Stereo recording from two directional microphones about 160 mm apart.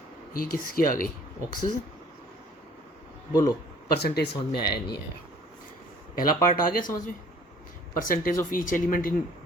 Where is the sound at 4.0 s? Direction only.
90° left.